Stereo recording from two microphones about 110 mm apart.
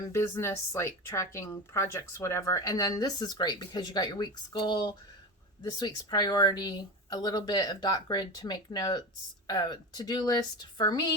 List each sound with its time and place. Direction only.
0.0 s a woman's voice: 25° left (ahead or behind); by 11.1 s 40° left (ahead or behind)